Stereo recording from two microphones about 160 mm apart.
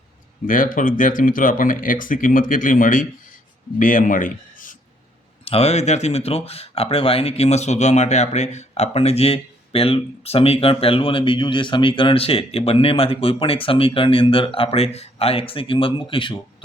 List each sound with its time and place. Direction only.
0.4 s speech: 55° left (ahead or behind)
5.5 s speech: 40° left (ahead or behind)